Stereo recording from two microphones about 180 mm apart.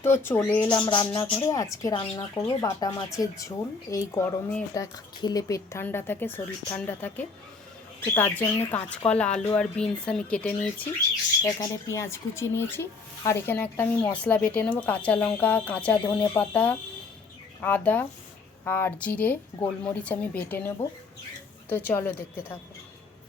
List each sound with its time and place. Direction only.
0.0 s speech: 15° left (ahead or behind)
0.8 s speech: 25° left (ahead or behind)